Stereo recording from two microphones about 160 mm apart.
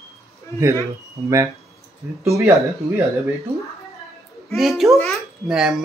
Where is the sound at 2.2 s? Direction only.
20° right (ahead or behind).